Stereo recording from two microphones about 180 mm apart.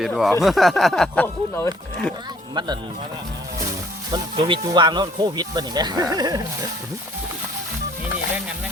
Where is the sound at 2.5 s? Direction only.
25° right (ahead or behind).